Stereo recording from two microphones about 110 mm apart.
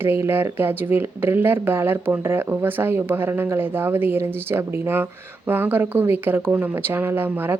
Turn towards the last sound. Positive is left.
turn(degrees=-20)  # may be behind; listen again after turning